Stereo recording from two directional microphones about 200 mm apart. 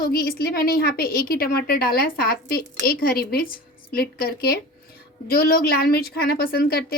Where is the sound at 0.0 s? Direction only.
50° left (ahead or behind).